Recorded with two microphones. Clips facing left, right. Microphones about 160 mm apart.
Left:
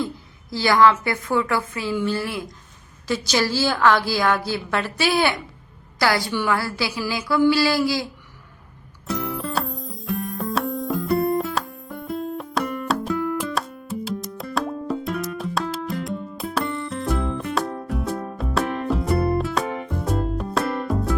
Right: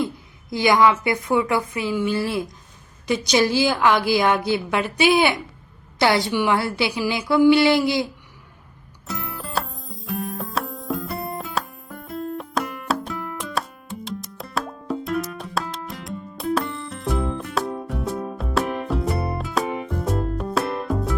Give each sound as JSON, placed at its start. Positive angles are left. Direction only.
{"t": 0.5, "sound": "a woman's voice", "side_deg": -20}
{"t": 9.0, "sound": "music", "side_deg": 0}